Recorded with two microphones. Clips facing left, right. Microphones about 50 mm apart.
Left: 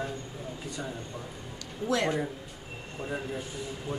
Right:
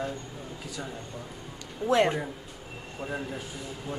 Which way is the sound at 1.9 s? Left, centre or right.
Right.